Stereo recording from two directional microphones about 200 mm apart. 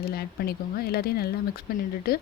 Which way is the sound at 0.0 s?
50° left (ahead or behind).